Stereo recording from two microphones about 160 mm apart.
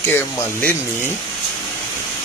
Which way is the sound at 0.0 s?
15° left (ahead or behind).